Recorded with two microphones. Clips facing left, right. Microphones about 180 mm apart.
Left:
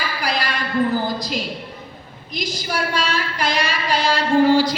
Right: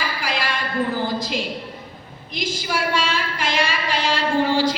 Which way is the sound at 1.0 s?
40° left (ahead or behind).